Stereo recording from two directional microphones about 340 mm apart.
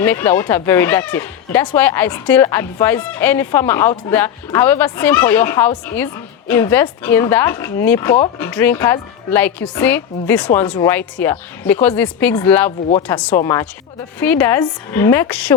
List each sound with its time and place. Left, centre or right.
0.0 s a woman's voice: centre